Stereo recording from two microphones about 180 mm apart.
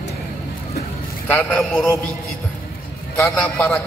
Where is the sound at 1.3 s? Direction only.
5° left (ahead or behind).